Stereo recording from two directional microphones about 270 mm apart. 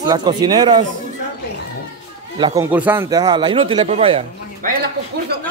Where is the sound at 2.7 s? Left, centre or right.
Centre.